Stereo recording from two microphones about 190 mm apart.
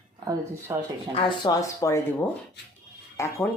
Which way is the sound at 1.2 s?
25° left (ahead or behind).